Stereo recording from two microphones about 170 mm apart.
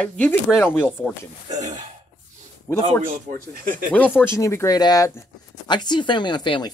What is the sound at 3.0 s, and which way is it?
Speech, 55° right (ahead or behind).